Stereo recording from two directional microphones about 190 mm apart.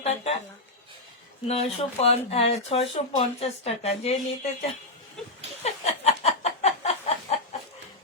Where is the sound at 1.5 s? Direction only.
30° left (ahead or behind).